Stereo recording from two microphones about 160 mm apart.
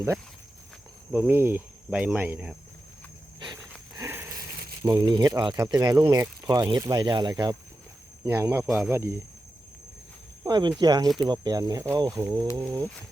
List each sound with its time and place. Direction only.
1.1 s cricket: 15° right (ahead or behind)
3.9 s dog: 15° right (ahead or behind)
4.8 s speech: 25° right (ahead or behind)
8.2 s cricket: 15° right (ahead or behind)
8.6 s speech: 5° right (ahead or behind)
8.9 s cricket: 15° right (ahead or behind)
10.4 s speech: 25° right (ahead or behind)